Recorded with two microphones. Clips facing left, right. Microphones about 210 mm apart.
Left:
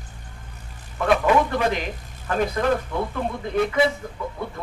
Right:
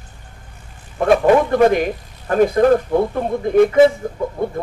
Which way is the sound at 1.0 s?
45° right (ahead or behind).